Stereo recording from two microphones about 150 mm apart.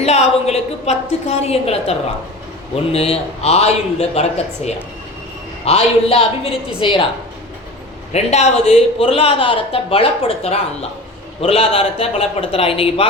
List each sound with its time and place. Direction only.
0.0 s a woman's voice: 45° left (ahead or behind)
8.1 s speech: 45° left (ahead or behind)